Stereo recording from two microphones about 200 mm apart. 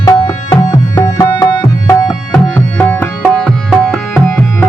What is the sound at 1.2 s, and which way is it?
Tabla, 20° left (ahead or behind).